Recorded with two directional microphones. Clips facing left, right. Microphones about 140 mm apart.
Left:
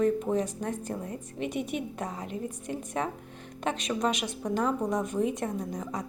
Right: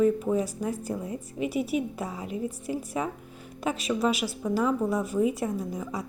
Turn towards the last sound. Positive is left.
turn(degrees=-5)  # may be behind; listen again after turning